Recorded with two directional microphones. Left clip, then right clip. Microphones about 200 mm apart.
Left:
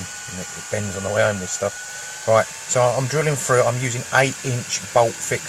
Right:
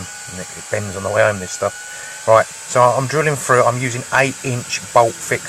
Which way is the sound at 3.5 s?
10° right (ahead or behind).